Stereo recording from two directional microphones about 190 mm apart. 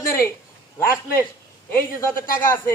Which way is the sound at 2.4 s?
15° left (ahead or behind).